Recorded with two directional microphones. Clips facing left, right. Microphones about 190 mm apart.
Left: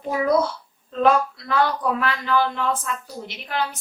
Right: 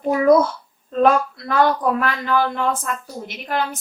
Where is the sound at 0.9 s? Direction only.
45° right (ahead or behind).